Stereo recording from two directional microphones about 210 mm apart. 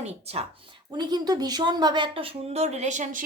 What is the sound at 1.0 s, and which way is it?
A woman's voice, 20° right (ahead or behind).